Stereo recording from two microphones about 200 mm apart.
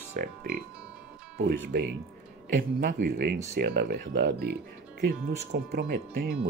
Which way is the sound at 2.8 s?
50° right (ahead or behind).